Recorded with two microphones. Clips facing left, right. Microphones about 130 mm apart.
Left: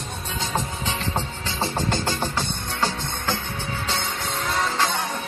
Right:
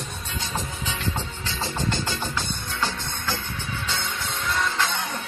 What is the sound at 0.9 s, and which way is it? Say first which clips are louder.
Music: left 2 dB; 35° left (ahead or behind).